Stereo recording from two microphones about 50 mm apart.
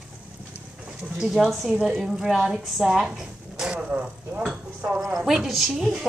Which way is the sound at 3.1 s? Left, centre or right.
Centre.